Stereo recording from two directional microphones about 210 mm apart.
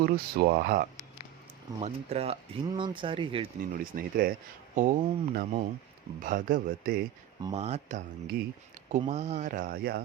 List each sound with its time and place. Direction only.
0.0 s speech: 50° right (ahead or behind)
1.8 s speech: 30° right (ahead or behind)
3.7 s speech: 45° right (ahead or behind)
7.5 s speech: 30° right (ahead or behind); by 10.0 s 45° right (ahead or behind)